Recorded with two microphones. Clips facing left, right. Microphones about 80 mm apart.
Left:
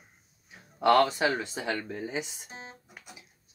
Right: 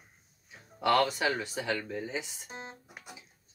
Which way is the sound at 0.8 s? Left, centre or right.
Left.